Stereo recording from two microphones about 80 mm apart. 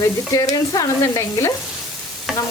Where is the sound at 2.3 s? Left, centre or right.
Centre.